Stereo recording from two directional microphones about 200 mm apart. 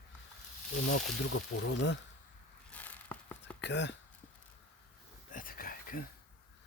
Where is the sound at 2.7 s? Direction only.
10° left (ahead or behind).